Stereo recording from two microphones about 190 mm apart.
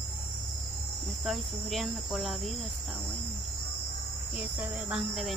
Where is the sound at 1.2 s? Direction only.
Centre (ahead or behind).